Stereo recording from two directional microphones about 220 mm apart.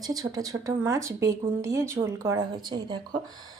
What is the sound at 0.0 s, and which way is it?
Speech, 15° right (ahead or behind).